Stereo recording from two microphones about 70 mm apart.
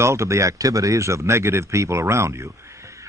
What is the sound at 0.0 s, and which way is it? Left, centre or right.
Speech, right.